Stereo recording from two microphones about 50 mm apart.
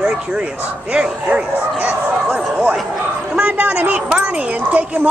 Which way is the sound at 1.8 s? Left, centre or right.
Right.